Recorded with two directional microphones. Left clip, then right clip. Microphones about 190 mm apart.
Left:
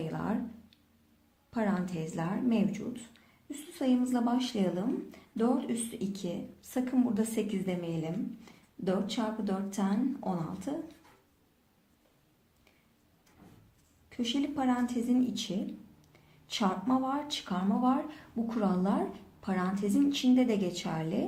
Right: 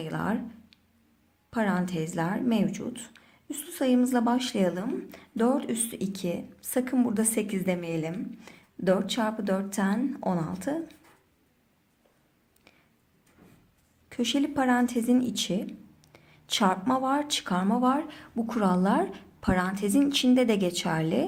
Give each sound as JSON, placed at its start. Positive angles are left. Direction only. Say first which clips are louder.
{"t": 0.1, "sound": "speech", "louder": "right 5 dB", "side_deg": -40}
{"t": 1.5, "sound": "a woman's voice", "louder": "right 5 dB", "side_deg": -40}
{"t": 14.1, "sound": "a woman's voice", "louder": "right 5 dB", "side_deg": -55}